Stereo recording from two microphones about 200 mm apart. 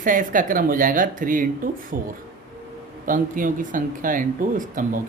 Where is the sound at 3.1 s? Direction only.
45° right (ahead or behind).